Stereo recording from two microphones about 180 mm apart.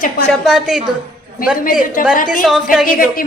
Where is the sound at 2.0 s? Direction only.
50° left (ahead or behind).